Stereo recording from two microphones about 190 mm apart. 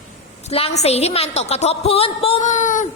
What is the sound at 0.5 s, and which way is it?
A woman's voice, 35° left (ahead or behind).